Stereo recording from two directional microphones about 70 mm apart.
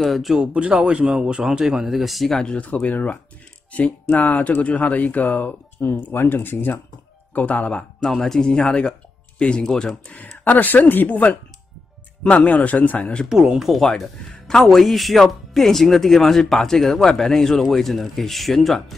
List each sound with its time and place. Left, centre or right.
0.0 s speech: centre
0.5 s speech: centre; by 7.8 s left
8.0 s speech: centre
10.4 s speech: left
13.3 s speech: centre